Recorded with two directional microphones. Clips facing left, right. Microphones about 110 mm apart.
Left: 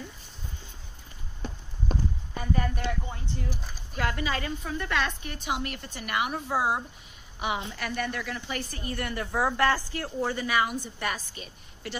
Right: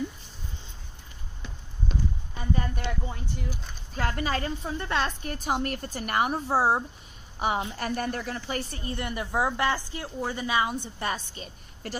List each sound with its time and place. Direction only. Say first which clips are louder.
1.4 s clip-clop: left 2 dB; 45° left (ahead or behind)
3.9 s a woman's voice: right 1 dB; 40° right (ahead or behind)
4.6 s a woman's voice: left 1 dB; 30° right (ahead or behind)